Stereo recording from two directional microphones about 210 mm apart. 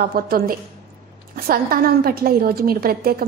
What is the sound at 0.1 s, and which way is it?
A woman's voice, 45° right (ahead or behind).